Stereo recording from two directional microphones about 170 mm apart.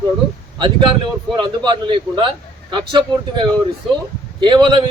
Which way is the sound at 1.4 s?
25° right (ahead or behind).